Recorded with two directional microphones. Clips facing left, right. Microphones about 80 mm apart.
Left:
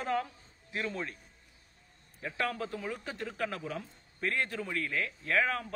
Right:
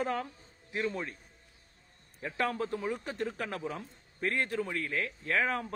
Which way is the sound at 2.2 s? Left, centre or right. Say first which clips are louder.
Right 2 dB; right.